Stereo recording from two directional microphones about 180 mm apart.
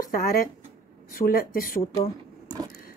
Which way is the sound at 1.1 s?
55° left (ahead or behind).